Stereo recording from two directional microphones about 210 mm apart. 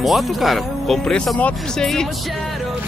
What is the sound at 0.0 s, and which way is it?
Speech, centre (ahead or behind).